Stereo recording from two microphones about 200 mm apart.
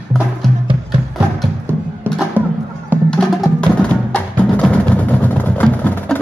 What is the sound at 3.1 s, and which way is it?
Music, 5° left (ahead or behind).